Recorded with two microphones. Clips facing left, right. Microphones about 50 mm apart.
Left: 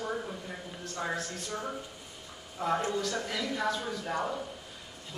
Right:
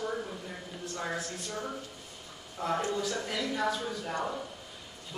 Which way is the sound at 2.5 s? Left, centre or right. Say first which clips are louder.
Left 1 dB; centre.